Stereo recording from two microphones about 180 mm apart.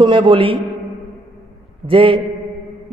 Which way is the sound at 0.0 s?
25° right (ahead or behind).